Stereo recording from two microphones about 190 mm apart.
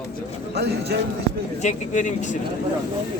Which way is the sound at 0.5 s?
60° right (ahead or behind).